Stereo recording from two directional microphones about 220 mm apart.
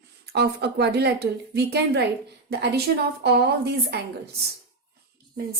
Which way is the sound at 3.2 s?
50° right (ahead or behind).